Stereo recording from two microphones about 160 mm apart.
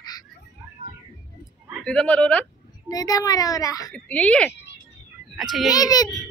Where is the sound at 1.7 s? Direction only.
5° left (ahead or behind).